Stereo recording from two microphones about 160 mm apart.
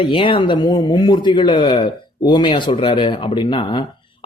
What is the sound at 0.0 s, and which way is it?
A man's voice, 30° left (ahead or behind).